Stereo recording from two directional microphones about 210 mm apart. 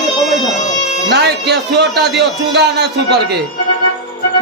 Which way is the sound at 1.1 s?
55° right (ahead or behind).